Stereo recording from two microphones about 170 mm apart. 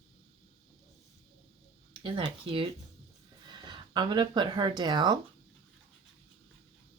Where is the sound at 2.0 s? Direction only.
30° right (ahead or behind).